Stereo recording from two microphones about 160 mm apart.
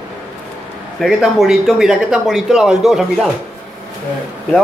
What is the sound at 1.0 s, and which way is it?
Speech, centre (ahead or behind).